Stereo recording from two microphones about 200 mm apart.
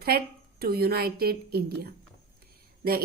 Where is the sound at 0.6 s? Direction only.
50° right (ahead or behind).